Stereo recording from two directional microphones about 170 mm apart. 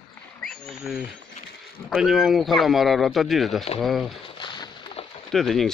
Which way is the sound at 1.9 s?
Centre (ahead or behind).